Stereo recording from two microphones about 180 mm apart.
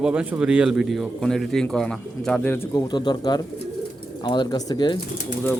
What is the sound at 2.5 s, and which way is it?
Speech, 15° left (ahead or behind).